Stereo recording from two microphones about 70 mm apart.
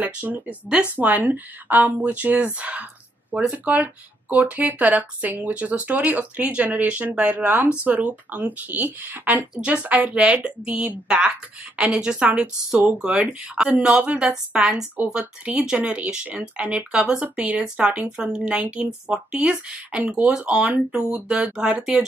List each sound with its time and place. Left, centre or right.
0.0 s speech: right